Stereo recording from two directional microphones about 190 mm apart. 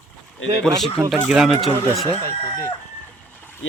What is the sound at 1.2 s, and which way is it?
Speech, centre (ahead or behind).